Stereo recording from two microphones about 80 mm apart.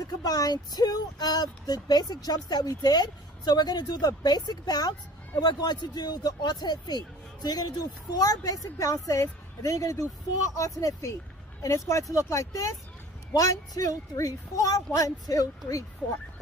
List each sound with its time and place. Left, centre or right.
0.0 s a woman's voice: left